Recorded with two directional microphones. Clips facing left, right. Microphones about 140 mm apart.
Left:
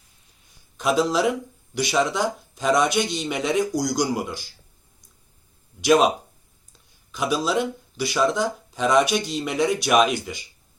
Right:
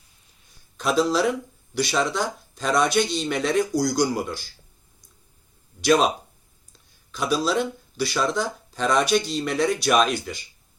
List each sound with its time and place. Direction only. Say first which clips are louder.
0.8 s speech: even; 15° left (ahead or behind)
5.8 s speech: left 2 dB; 10° left (ahead or behind)
7.1 s speech: even; 15° left (ahead or behind)